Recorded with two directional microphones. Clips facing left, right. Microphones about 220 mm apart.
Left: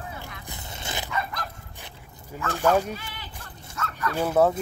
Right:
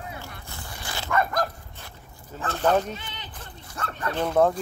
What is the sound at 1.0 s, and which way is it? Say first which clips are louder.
Bow-wow: right 10 dB; 50° right (ahead or behind).